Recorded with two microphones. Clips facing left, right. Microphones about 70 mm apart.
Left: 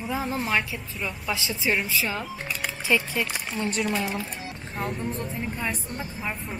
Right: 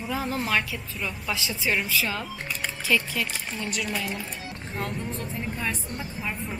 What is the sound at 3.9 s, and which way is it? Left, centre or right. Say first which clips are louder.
Speech: left 3 dB; centre.